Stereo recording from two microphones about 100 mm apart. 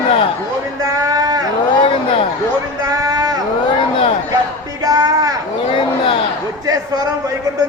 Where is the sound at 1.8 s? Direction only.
65° left (ahead or behind).